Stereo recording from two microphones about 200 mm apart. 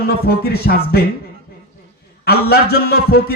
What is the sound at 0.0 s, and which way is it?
A man's voice, 50° left (ahead or behind).